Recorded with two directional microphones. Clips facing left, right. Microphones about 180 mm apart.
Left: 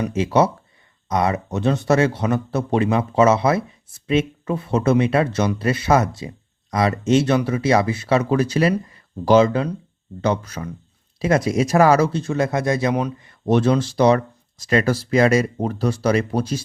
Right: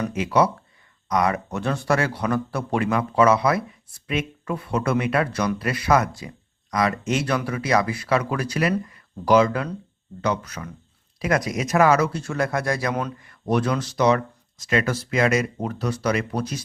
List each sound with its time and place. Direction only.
0.1 s a man's voice: 25° left (ahead or behind)